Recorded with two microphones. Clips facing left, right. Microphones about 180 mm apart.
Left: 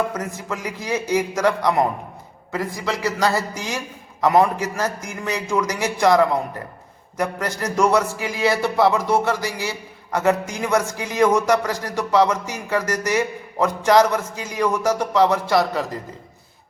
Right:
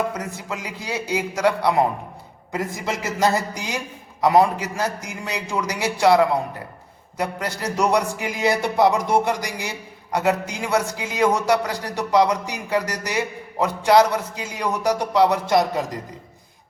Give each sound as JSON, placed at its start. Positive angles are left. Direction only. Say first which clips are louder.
{"t": 0.1, "sound": "music", "louder": "left 2 dB", "side_deg": -10}
{"t": 2.5, "sound": "a man's voice", "louder": "left 1 dB", "side_deg": -20}
{"t": 4.2, "sound": "music", "louder": "even", "side_deg": -10}